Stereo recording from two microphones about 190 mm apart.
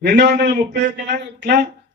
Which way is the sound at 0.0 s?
60° right (ahead or behind).